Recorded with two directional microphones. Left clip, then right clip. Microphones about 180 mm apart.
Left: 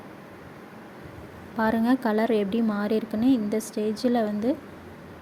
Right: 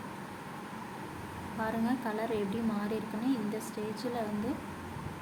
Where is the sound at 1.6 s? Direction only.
50° left (ahead or behind).